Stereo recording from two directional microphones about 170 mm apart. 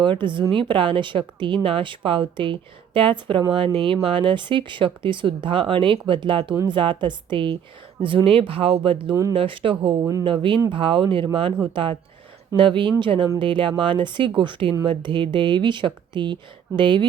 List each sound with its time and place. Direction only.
0.0 s speech: 30° right (ahead or behind)
10.0 s speech: 20° right (ahead or behind)
10.2 s speech: 30° right (ahead or behind)